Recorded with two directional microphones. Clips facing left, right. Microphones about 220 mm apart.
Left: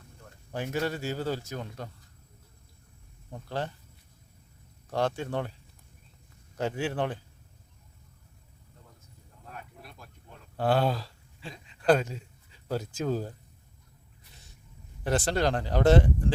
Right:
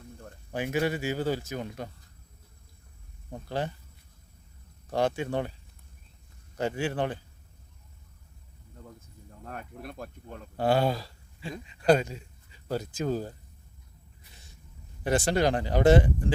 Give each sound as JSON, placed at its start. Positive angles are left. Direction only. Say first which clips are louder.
{"t": 0.5, "sound": "speech", "louder": "right 3 dB", "side_deg": -10}
{"t": 3.3, "sound": "speech", "louder": "right 2 dB", "side_deg": -15}
{"t": 4.9, "sound": "speech", "louder": "right 2 dB", "side_deg": -15}
{"t": 6.6, "sound": "speech", "louder": "right 1 dB", "side_deg": -5}
{"t": 9.4, "sound": "speech", "louder": "right 6 dB", "side_deg": -55}
{"t": 10.6, "sound": "speech", "louder": "right 1 dB", "side_deg": -10}
{"t": 15.3, "sound": "speech", "louder": "right 3 dB", "side_deg": -5}